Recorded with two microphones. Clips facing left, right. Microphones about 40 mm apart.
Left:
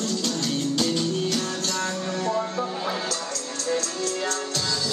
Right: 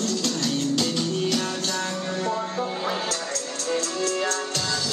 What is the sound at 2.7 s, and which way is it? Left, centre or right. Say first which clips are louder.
Music: right 1 dB; centre.